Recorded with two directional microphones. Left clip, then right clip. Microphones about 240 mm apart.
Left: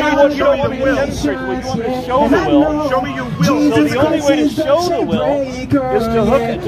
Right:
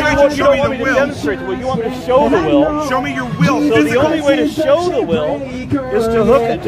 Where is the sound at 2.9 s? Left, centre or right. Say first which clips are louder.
Even; right.